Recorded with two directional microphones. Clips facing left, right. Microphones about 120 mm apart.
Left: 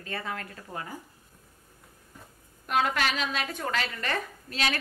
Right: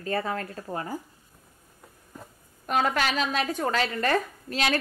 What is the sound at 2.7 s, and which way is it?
A woman's voice, 40° right (ahead or behind).